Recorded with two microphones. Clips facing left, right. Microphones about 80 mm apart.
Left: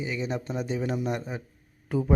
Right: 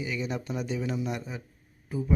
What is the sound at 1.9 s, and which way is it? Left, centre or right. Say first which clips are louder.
Speech: left 5 dB; left.